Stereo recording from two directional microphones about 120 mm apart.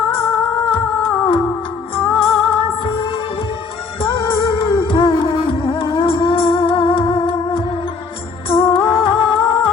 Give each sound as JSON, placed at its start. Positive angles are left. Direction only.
{"t": 0.1, "sound": "music", "side_deg": 45}